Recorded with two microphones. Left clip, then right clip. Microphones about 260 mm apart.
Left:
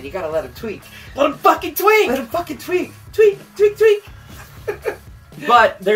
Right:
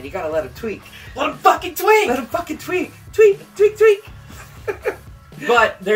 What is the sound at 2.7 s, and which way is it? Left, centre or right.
Speech, centre.